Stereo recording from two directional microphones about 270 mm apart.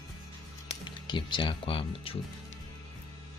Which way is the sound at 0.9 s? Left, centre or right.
Centre.